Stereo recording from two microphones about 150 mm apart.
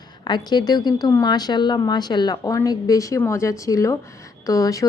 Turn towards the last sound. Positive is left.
turn(degrees=20)  # may be behind; listen again after turning